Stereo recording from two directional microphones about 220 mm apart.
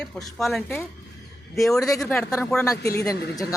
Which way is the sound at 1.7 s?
15° left (ahead or behind).